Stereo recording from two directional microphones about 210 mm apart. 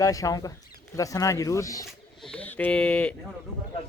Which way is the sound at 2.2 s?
5° left (ahead or behind).